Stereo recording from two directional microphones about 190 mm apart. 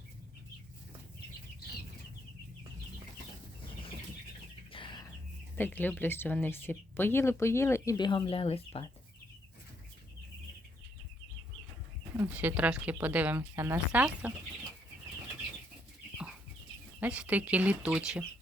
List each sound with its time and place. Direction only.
4.7 s chicken: 25° left (ahead or behind)
5.5 s speech: 10° left (ahead or behind); by 8.9 s 30° left (ahead or behind)
12.1 s speech: 10° right (ahead or behind)
17.0 s speech: 5° right (ahead or behind)